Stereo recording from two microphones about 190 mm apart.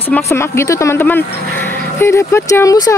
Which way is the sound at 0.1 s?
15° left (ahead or behind).